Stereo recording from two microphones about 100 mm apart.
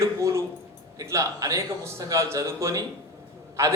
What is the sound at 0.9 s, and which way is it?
A man's voice, 30° right (ahead or behind).